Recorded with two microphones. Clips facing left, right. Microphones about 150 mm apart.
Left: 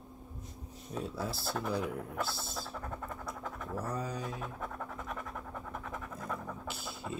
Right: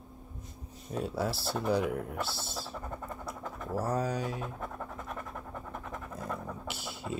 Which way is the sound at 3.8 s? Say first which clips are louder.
Right 7 dB; 90° right.